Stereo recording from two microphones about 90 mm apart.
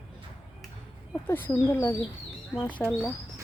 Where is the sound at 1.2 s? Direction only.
25° left (ahead or behind).